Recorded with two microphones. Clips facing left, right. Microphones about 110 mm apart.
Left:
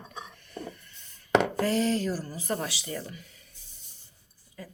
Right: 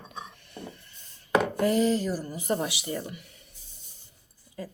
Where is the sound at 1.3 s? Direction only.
85° left.